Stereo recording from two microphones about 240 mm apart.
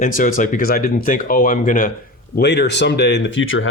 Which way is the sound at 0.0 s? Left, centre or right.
Left.